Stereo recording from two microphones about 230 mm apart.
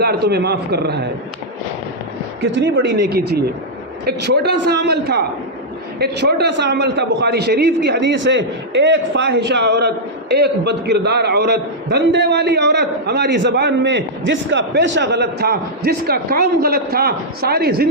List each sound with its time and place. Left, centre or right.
0.0 s a man's voice: right
2.4 s a man's voice: right